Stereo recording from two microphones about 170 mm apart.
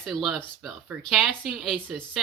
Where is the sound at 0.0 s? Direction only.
Centre (ahead or behind).